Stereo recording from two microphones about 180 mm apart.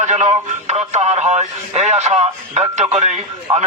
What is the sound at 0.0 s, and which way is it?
Speech, 40° right (ahead or behind).